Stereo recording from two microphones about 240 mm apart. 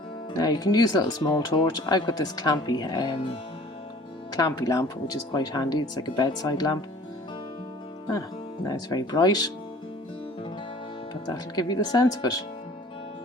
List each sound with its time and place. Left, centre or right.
0.3 s speech: centre
4.4 s speech: centre
8.6 s speech: centre
11.1 s speech: centre